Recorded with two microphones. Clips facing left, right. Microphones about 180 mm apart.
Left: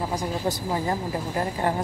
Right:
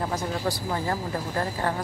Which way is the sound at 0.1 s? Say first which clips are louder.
Left 1 dB; 15° left (ahead or behind).